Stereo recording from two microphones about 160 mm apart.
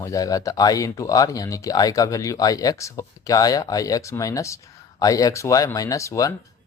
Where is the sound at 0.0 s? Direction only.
20° left (ahead or behind).